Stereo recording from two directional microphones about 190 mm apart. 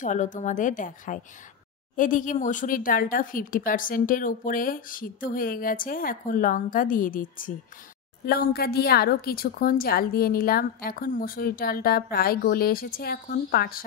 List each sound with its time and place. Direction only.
0.0 s a woman's voice: 40° left (ahead or behind)